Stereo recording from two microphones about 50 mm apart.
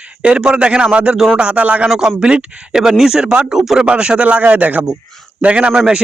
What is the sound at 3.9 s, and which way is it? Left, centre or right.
Speech, right.